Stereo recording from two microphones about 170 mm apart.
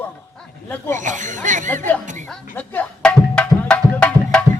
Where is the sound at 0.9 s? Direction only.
50° right (ahead or behind).